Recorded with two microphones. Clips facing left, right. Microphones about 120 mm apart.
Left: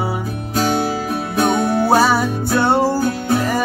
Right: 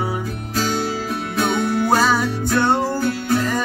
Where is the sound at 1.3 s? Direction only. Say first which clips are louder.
Left 4 dB; 35° left (ahead or behind).